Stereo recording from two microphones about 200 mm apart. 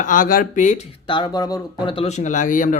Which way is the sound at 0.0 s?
40° left (ahead or behind).